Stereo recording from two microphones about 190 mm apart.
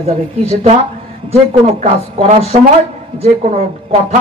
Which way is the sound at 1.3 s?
35° right (ahead or behind).